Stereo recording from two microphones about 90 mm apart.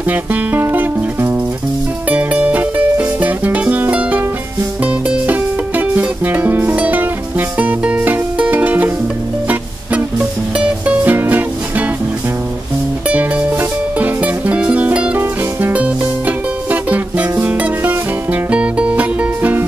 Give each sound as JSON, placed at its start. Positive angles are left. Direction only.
{"t": 0.1, "sound": "music", "side_deg": -20}
{"t": 10.6, "sound": "music", "side_deg": -15}
{"t": 13.1, "sound": "music", "side_deg": -15}